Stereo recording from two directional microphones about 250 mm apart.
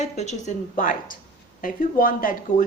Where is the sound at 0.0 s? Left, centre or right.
Left.